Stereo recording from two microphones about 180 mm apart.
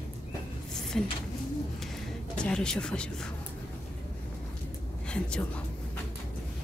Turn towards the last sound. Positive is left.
turn(degrees=5)  # may be behind; listen again after turning